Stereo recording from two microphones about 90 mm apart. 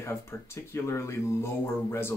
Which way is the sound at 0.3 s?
30° left (ahead or behind).